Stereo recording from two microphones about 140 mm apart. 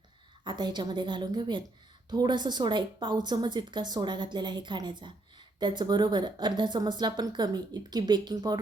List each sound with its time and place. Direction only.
0.4 s speech: 30° right (ahead or behind)